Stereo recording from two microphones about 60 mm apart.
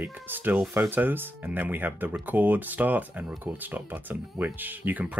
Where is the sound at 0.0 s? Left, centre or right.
Right.